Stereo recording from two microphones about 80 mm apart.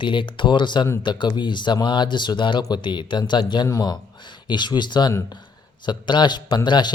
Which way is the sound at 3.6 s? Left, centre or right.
Left.